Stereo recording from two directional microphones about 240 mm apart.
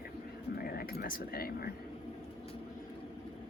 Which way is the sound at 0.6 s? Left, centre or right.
Left.